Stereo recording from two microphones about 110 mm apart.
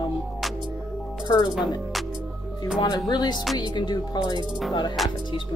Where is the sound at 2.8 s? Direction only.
40° left (ahead or behind).